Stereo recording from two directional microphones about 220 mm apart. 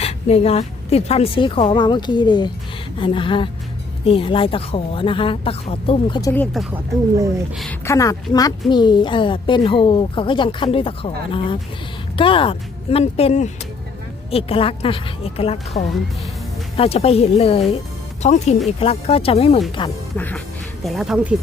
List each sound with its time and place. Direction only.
0.0 s a woman's voice: 25° left (ahead or behind)
6.3 s speech: 5° left (ahead or behind)
7.9 s a woman's voice: 15° left (ahead or behind)
20.1 s a woman's voice: 10° left (ahead or behind)